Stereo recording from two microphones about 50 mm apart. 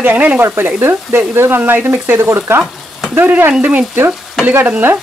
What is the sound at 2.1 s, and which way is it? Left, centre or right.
Speech, right.